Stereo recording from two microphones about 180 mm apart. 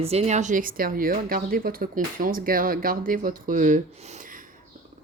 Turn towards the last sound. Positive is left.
turn(degrees=-45)  # may be behind; listen again after turning